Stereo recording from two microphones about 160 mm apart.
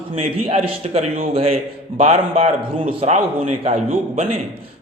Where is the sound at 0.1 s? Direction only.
35° right (ahead or behind).